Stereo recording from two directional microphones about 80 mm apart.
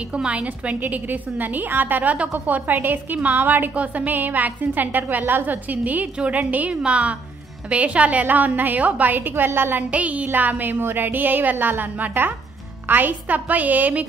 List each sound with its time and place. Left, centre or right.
0.1 s a woman's voice: centre